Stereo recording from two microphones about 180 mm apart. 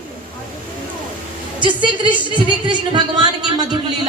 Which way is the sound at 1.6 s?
25° right (ahead or behind).